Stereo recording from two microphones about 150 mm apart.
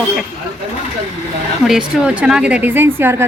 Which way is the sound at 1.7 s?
5° right (ahead or behind).